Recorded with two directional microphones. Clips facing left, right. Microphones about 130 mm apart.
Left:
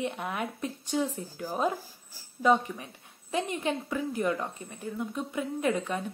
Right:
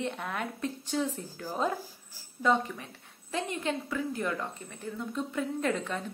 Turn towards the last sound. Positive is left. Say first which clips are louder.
# left 2 dB
turn(degrees=15)  # may be behind; listen again after turning